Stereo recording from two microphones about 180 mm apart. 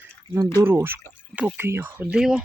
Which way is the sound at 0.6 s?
10° right (ahead or behind).